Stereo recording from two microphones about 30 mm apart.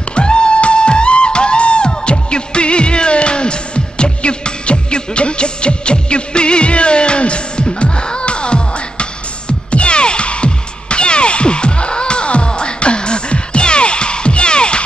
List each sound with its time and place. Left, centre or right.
0.1 s music: left